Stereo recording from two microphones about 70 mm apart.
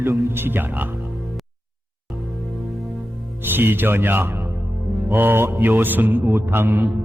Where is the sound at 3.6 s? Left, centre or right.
Right.